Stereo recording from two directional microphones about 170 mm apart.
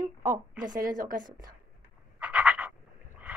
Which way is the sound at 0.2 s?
50° right (ahead or behind).